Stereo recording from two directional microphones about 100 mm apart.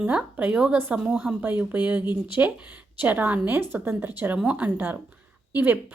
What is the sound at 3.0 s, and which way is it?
A woman's voice, 20° right (ahead or behind).